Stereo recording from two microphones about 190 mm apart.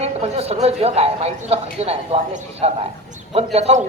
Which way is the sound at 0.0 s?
30° right (ahead or behind).